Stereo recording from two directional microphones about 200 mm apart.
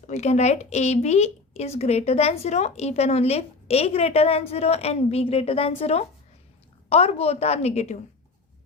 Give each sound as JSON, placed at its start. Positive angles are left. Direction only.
{"t": 0.1, "sound": "a woman's voice", "side_deg": 35}